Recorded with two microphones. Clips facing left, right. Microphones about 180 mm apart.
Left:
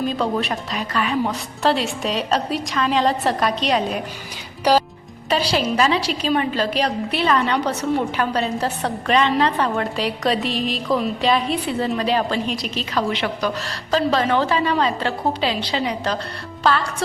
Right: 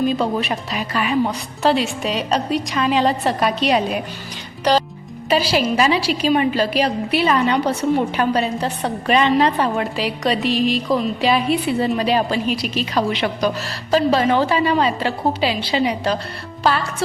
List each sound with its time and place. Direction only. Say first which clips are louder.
0.1 s a woman's voice: right 2 dB; 5° right (ahead or behind)
5.3 s a woman's voice: right 2 dB; 5° right (ahead or behind)
8.5 s a woman's voice: right 1 dB; centre (ahead or behind)
9.0 s a woman's voice: right 2 dB; 15° right (ahead or behind)
9.9 s a woman's voice: right 1 dB; centre (ahead or behind)